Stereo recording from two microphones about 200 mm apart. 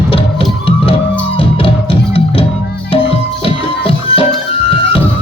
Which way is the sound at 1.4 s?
30° left (ahead or behind).